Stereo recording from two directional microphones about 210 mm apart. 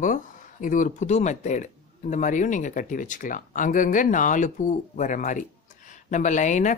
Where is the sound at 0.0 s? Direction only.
40° left (ahead or behind).